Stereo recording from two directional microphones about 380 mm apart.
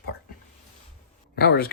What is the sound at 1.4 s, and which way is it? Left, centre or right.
Speech, left.